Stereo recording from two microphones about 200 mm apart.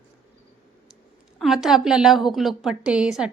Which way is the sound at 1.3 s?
Centre (ahead or behind).